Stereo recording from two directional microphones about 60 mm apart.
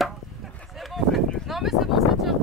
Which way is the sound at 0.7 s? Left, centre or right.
Centre.